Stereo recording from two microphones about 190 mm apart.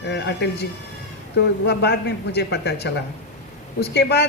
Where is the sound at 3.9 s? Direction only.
60° left (ahead or behind).